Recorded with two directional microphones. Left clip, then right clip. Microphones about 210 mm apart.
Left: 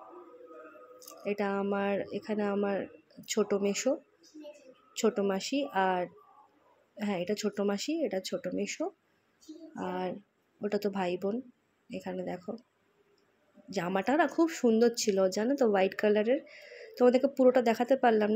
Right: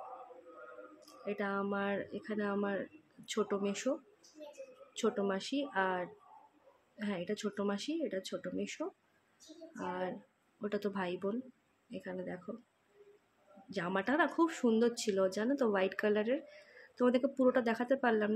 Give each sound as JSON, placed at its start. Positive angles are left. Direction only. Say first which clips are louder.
{"t": 1.2, "sound": "speech", "louder": "left 5 dB", "side_deg": 20}
{"t": 4.9, "sound": "speech", "louder": "left 5 dB", "side_deg": 10}
{"t": 13.7, "sound": "speech", "louder": "left 5 dB", "side_deg": 15}